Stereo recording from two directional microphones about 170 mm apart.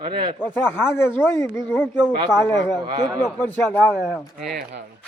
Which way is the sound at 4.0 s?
Centre (ahead or behind).